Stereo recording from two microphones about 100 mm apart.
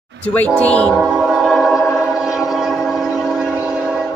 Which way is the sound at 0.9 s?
5° right (ahead or behind).